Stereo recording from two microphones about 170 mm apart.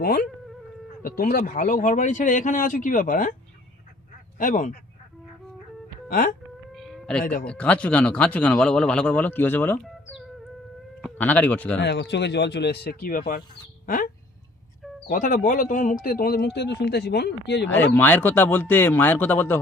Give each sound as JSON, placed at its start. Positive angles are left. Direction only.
{"t": 1.0, "sound": "speech", "side_deg": 60}
{"t": 4.4, "sound": "speech", "side_deg": 50}
{"t": 6.1, "sound": "speech", "side_deg": 55}
{"t": 6.7, "sound": "cat", "side_deg": 0}
{"t": 7.4, "sound": "speech", "side_deg": 5}
{"t": 9.8, "sound": "chicken", "side_deg": 0}
{"t": 11.0, "sound": "speech", "side_deg": 10}
{"t": 11.8, "sound": "speech", "side_deg": 90}
{"t": 15.1, "sound": "speech", "side_deg": 50}
{"t": 17.9, "sound": "speech", "side_deg": 10}